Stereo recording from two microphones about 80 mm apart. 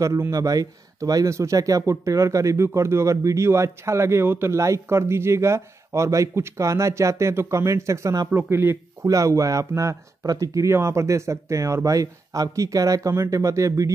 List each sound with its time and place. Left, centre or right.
0.3 s speech: right
8.4 s speech: right
9.0 s speech: right